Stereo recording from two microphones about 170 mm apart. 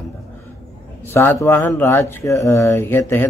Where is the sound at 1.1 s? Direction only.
15° left (ahead or behind).